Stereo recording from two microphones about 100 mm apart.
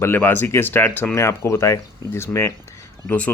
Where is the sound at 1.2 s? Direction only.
25° left (ahead or behind).